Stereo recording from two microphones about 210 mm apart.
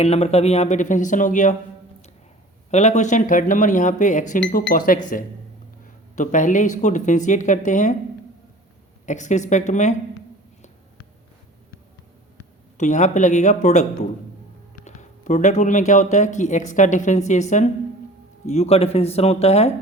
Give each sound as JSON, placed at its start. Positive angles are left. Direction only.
{"t": 0.0, "sound": "speech", "side_deg": 30}
{"t": 2.6, "sound": "speech", "side_deg": 35}
{"t": 9.0, "sound": "speech", "side_deg": 35}
{"t": 12.7, "sound": "speech", "side_deg": 35}
{"t": 14.8, "sound": "speech", "side_deg": 35}